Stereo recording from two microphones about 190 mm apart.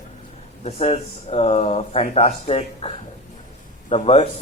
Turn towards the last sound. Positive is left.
turn(degrees=35)  # may be behind; listen again after turning